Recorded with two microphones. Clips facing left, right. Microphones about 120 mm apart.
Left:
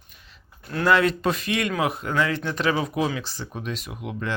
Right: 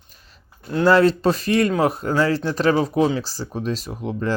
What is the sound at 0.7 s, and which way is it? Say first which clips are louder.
Speech: right 5 dB; 30° right (ahead or behind).